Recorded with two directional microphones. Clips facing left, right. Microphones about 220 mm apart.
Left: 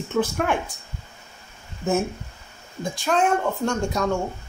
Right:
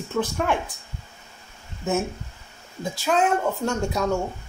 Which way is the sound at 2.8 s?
5° right (ahead or behind).